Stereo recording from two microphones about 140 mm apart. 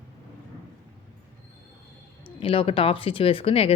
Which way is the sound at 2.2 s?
40° left (ahead or behind).